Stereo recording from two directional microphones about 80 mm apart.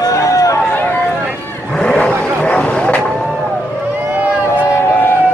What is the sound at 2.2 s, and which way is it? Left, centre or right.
Vehicle, centre.